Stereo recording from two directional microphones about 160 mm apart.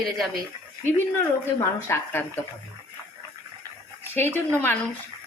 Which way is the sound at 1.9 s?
15° left (ahead or behind).